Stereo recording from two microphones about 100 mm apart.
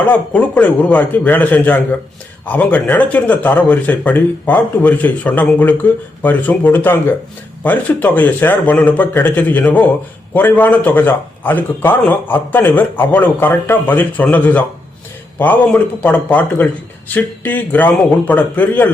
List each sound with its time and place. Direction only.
0.0 s a man's voice: 15° left (ahead or behind)